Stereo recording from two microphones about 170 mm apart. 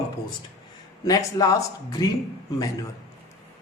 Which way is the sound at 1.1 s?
20° left (ahead or behind).